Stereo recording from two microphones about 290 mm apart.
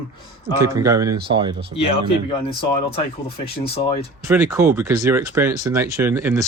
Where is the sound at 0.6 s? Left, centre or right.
Centre.